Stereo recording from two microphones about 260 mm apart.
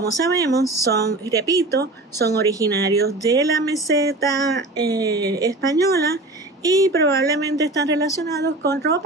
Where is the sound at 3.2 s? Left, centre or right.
Centre.